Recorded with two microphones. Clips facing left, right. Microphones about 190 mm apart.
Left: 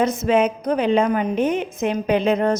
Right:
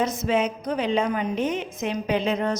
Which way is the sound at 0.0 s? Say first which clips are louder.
Left 5 dB; 55° left (ahead or behind).